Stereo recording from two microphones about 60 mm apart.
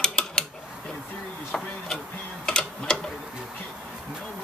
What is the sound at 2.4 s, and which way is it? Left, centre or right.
Typing, centre.